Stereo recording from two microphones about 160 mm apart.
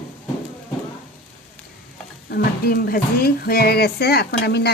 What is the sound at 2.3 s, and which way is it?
Speech, 70° left (ahead or behind).